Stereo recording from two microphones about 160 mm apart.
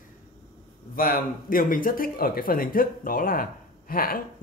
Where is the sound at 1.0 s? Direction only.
65° left (ahead or behind).